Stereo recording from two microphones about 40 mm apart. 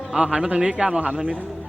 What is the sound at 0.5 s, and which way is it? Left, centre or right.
Speech, right.